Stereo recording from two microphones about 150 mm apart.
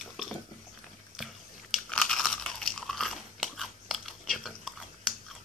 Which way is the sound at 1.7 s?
5° left (ahead or behind).